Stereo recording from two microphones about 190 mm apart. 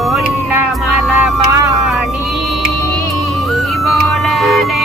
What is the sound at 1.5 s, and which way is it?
Vehicle, 15° right (ahead or behind).